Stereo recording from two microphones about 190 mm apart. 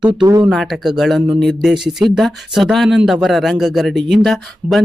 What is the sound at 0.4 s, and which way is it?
Speech, centre (ahead or behind).